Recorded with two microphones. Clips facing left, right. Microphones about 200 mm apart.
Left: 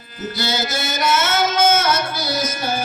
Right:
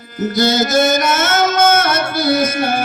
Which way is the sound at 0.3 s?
45° right (ahead or behind).